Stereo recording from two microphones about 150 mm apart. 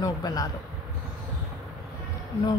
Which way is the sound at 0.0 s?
25° left (ahead or behind).